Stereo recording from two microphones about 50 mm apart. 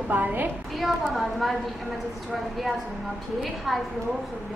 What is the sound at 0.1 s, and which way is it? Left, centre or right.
Speech, right.